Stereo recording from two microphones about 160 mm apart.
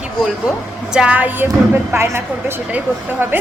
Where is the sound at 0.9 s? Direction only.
10° right (ahead or behind).